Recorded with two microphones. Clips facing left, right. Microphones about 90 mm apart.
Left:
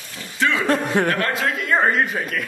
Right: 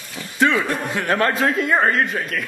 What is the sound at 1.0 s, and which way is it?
Speech, 35° right (ahead or behind).